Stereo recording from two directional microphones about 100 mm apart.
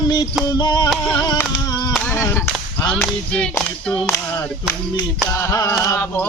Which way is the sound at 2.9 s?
10° left (ahead or behind).